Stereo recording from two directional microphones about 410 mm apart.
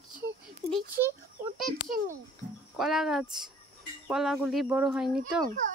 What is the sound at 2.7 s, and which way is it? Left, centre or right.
Speech, centre.